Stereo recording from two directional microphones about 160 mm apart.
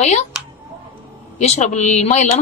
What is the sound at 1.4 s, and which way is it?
Speech, 45° left (ahead or behind).